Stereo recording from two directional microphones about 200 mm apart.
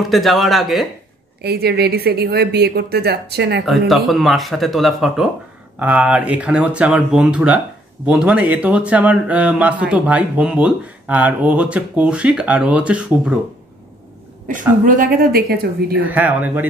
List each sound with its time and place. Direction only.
0.1 s speech: centre (ahead or behind)
1.4 s speech: 55° right (ahead or behind)
3.6 s speech: centre (ahead or behind)
14.9 s speech: 45° right (ahead or behind)
16.1 s speech: 10° right (ahead or behind)